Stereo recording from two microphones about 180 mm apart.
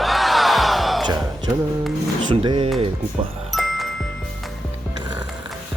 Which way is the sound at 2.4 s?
25° right (ahead or behind).